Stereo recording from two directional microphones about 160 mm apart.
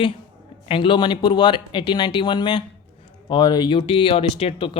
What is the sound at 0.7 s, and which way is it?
Speech, 30° left (ahead or behind).